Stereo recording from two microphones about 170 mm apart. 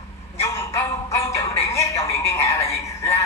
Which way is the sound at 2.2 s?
20° left (ahead or behind).